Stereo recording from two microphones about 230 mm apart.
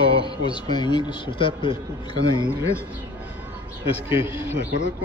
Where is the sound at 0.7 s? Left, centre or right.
Centre.